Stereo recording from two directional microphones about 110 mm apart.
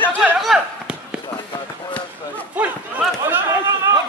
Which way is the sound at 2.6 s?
15° right (ahead or behind).